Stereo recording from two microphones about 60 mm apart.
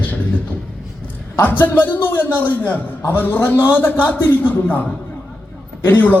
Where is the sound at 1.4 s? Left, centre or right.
Left.